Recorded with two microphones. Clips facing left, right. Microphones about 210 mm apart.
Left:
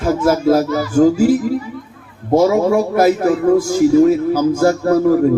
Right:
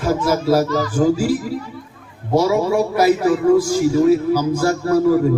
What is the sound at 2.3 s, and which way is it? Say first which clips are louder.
A man's voice: left 3 dB; 50° left (ahead or behind).